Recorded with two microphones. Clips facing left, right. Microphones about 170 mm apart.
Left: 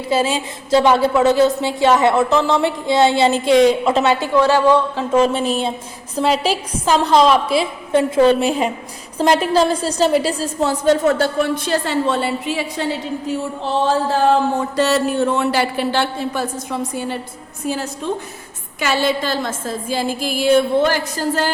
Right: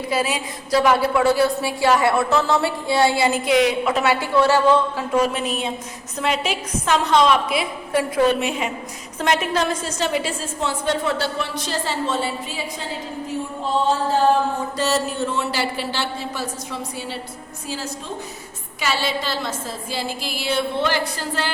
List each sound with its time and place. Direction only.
0.1 s a woman's voice: 25° left (ahead or behind)
5.1 s a woman's voice: 30° left (ahead or behind); by 12.6 s 65° left (ahead or behind)
14.8 s a woman's voice: 60° left (ahead or behind); by 21.5 s 45° left (ahead or behind)